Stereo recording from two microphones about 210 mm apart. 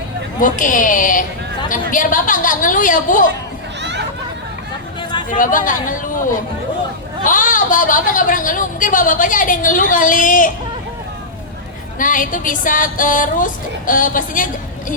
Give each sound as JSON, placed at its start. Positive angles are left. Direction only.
{"t": 0.3, "sound": "a woman's voice", "side_deg": 40}
{"t": 5.3, "sound": "a woman's voice", "side_deg": 40}
{"t": 11.9, "sound": "a woman's voice", "side_deg": 40}